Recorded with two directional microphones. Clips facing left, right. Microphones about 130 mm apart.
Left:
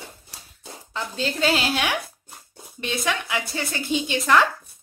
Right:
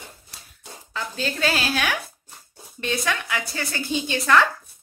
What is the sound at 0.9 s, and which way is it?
Speech, 20° left (ahead or behind).